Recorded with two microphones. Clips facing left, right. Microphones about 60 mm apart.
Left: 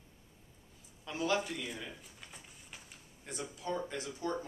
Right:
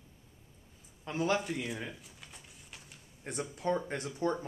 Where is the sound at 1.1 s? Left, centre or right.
Right.